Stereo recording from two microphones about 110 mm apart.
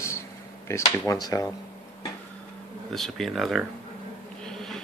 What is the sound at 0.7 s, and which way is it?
Speech, 25° left (ahead or behind).